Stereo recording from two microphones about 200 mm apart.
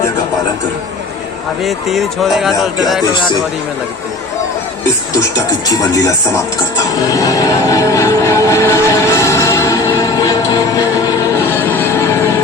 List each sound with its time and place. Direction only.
1.6 s speech: centre (ahead or behind)
5.7 s speech: 15° left (ahead or behind)
7.7 s music: 15° left (ahead or behind)